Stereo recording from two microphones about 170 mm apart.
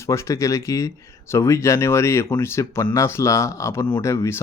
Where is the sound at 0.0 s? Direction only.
15° left (ahead or behind).